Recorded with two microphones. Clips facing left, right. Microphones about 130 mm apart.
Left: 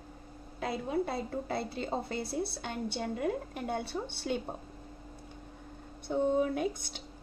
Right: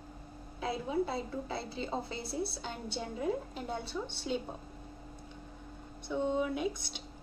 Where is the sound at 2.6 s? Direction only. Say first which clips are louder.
Left 4 dB; 65° left (ahead or behind).